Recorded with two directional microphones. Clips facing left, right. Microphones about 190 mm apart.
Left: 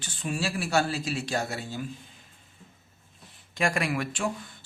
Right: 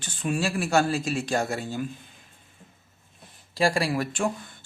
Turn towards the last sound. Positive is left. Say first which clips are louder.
# right 4 dB
turn(degrees=-30)  # may be behind; listen again after turning